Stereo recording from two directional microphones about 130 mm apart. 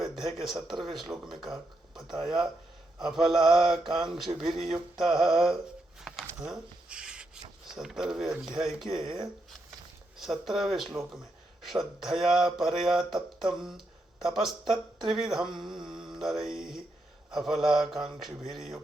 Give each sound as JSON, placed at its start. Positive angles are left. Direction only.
{"t": 0.0, "sound": "speech", "side_deg": 0}
{"t": 6.0, "sound": "a sound", "side_deg": -5}
{"t": 7.7, "sound": "speech", "side_deg": -5}
{"t": 10.2, "sound": "speech", "side_deg": 0}